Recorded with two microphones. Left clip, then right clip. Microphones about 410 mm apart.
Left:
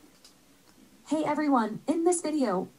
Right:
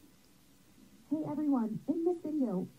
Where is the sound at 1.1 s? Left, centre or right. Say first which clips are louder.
Left 8 dB; centre.